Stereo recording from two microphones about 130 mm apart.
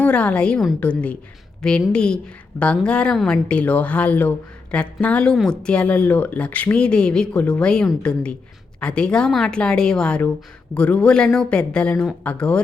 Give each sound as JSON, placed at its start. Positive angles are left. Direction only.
{"t": 0.0, "sound": "speech", "side_deg": 10}